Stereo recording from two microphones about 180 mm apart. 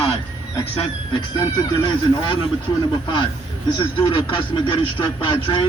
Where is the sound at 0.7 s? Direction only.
25° left (ahead or behind).